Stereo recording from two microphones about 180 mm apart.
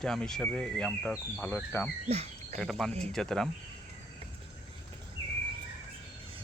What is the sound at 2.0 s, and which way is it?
Speech, 35° right (ahead or behind).